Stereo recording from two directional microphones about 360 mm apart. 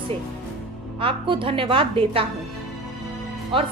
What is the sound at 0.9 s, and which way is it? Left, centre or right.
A woman's voice, centre.